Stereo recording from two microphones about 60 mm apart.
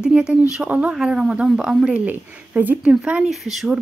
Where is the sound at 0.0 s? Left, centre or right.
Centre.